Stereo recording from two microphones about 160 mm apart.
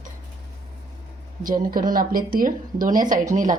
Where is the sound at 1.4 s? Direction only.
60° right (ahead or behind).